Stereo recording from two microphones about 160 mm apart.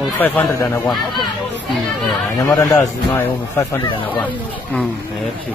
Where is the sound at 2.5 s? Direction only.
20° left (ahead or behind).